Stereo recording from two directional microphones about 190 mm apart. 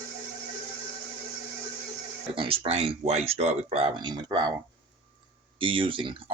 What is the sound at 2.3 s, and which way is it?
Speech, 30° right (ahead or behind).